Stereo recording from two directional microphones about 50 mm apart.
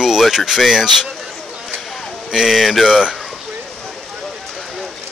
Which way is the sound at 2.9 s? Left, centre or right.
Centre.